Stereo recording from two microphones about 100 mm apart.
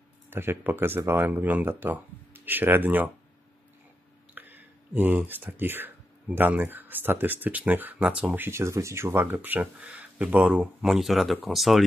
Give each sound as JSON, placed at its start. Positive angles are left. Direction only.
{"t": 0.3, "sound": "speech", "side_deg": -20}
{"t": 4.4, "sound": "speech", "side_deg": -20}